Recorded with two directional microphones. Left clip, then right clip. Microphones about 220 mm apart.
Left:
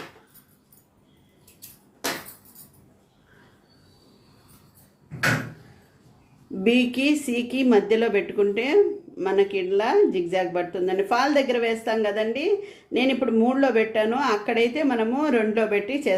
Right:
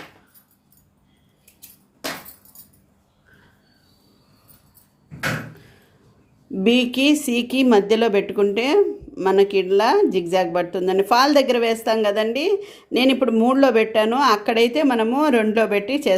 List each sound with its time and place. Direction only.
6.6 s speech: 35° right (ahead or behind)